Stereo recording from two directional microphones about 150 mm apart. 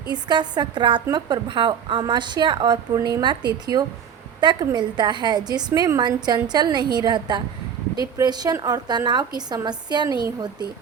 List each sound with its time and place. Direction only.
0.1 s a woman's voice: 30° right (ahead or behind)